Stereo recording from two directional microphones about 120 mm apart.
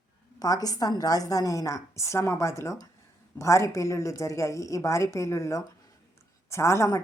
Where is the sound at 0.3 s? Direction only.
30° left (ahead or behind).